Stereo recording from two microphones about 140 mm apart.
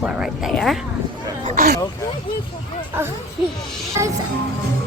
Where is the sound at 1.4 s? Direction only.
70° right (ahead or behind).